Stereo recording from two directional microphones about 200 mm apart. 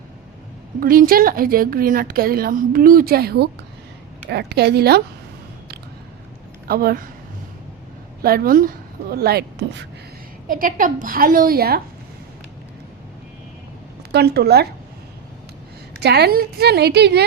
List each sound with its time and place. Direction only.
0.8 s a woman's voice: 45° right (ahead or behind)
6.7 s a woman's voice: 50° right (ahead or behind)
8.2 s a woman's voice: 45° right (ahead or behind)
14.1 s a woman's voice: 55° right (ahead or behind)
16.0 s a woman's voice: 55° right (ahead or behind)